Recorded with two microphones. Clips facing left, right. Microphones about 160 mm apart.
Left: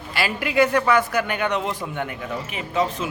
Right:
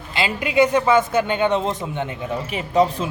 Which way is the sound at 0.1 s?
20° right (ahead or behind).